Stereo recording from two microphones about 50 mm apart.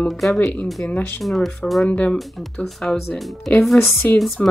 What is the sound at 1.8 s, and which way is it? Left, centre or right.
Speech, left.